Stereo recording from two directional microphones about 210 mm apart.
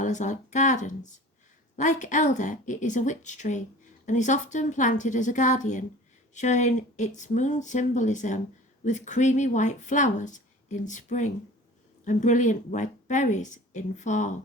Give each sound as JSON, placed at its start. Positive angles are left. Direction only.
{"t": 0.0, "sound": "speech", "side_deg": 35}